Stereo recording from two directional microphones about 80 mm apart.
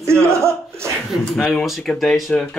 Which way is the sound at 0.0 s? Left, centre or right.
Right.